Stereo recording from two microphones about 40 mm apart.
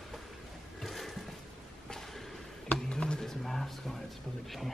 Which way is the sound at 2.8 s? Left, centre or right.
Left.